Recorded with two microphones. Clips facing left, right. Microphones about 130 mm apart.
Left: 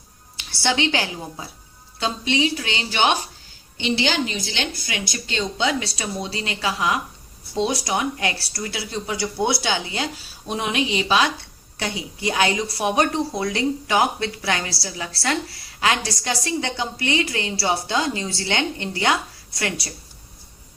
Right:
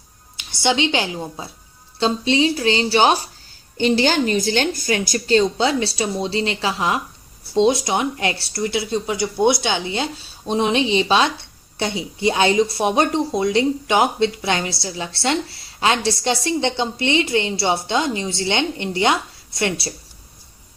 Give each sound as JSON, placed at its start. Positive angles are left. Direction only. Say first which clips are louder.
{"t": 0.3, "sound": "a woman's voice", "louder": "right 3 dB", "side_deg": -20}